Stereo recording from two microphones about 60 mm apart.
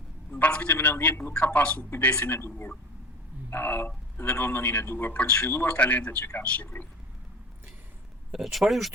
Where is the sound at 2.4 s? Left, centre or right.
Left.